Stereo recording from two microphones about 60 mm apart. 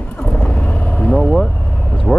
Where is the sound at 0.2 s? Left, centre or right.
Left.